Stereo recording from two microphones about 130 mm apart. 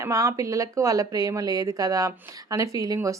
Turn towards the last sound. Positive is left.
turn(degrees=-25)  # may be behind; listen again after turning